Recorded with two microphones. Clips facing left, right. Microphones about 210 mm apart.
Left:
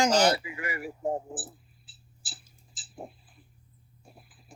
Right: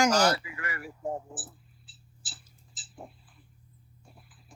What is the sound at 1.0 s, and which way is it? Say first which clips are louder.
Speech: left 3 dB; 25° left (ahead or behind).